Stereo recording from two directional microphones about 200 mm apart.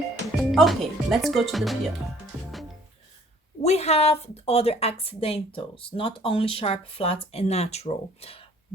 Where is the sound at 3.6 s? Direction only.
30° left (ahead or behind).